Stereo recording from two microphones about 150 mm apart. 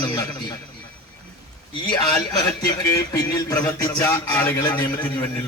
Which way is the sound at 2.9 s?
25° left (ahead or behind).